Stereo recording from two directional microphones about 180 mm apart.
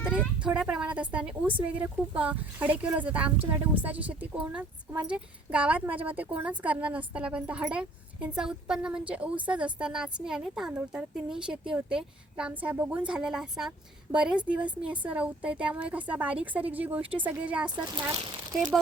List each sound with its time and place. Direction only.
0.0 s a woman's voice: 5° right (ahead or behind)
17.7 s speech: 25° right (ahead or behind)